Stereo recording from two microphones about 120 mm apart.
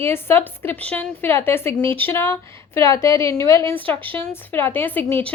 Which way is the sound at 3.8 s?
45° right (ahead or behind).